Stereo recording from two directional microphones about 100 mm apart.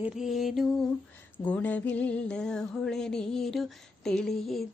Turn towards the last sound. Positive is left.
turn(degrees=5)  # may be behind; listen again after turning